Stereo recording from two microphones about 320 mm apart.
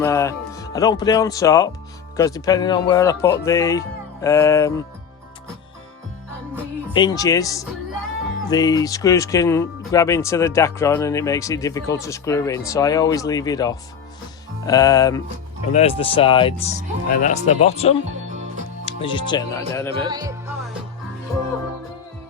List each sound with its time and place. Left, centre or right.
0.0 s speech: centre
6.9 s speech: centre
19.9 s speech: centre